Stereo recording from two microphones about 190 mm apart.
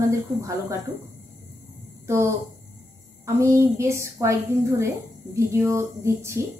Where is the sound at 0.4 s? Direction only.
15° right (ahead or behind).